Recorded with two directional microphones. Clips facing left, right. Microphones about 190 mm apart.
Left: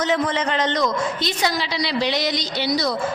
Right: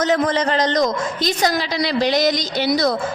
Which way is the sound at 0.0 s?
40° right (ahead or behind).